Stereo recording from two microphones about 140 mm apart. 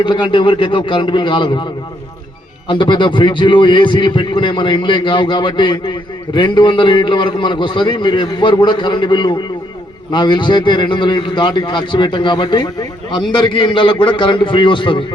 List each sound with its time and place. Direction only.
0.0 s a man's voice: 35° left (ahead or behind)
2.6 s a man's voice: 35° left (ahead or behind)